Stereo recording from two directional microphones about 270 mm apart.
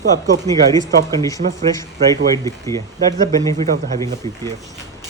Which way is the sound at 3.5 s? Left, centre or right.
Right.